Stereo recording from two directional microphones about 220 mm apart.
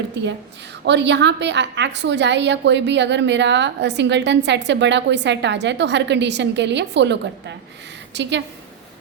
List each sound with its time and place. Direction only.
0.2 s a woman's voice: 50° right (ahead or behind)